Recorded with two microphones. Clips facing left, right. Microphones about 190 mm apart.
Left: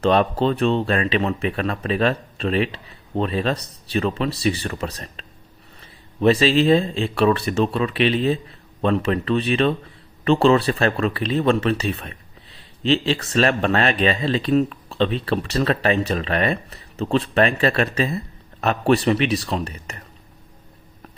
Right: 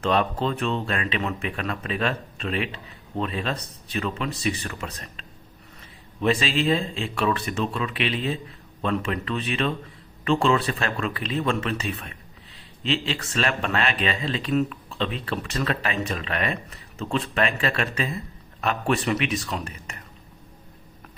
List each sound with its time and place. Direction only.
0.0 s speech: 35° left (ahead or behind)